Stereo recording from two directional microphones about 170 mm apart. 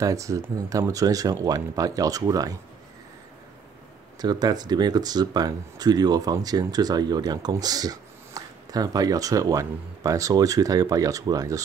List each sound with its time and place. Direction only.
0.0 s speech: 20° right (ahead or behind)
4.2 s speech: 25° right (ahead or behind)